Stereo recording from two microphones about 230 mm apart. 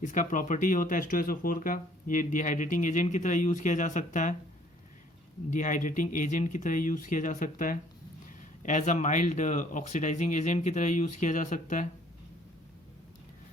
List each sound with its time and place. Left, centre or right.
0.0 s speech: left
5.5 s speech: left